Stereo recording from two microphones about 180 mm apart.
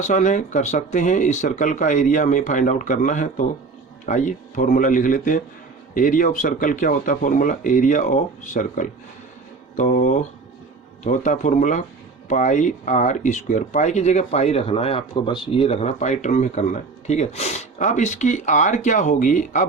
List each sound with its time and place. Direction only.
0.0 s speech: 45° left (ahead or behind)